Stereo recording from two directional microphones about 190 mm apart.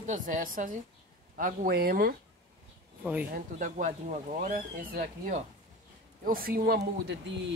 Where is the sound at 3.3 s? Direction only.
40° right (ahead or behind).